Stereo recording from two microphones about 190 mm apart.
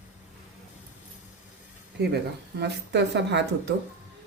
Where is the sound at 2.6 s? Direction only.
65° right (ahead or behind).